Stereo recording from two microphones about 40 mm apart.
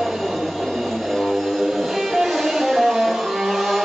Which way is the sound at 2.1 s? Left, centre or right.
Centre.